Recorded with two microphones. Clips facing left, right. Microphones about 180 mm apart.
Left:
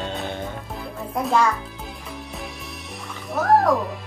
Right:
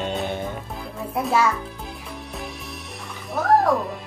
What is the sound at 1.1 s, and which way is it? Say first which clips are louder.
Speech: left 1 dB; 5° right (ahead or behind).